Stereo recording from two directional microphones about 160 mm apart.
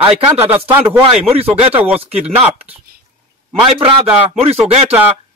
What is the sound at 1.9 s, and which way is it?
A man's voice, 40° right (ahead or behind).